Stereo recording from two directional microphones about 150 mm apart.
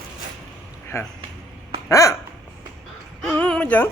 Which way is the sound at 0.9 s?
20° left (ahead or behind).